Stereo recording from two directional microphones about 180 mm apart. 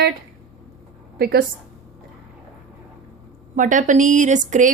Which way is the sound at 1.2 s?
60° right (ahead or behind).